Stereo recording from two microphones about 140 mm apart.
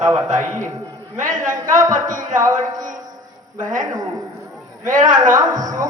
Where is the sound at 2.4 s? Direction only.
25° right (ahead or behind).